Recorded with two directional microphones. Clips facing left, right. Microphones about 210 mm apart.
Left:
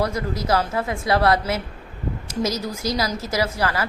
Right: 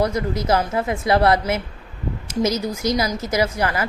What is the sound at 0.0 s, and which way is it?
Speech, 20° right (ahead or behind).